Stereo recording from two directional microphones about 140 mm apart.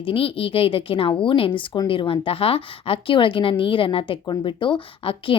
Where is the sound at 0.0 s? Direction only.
40° left (ahead or behind).